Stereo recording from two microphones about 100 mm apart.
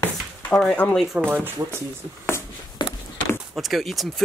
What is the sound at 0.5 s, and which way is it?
Speech, 5° left (ahead or behind).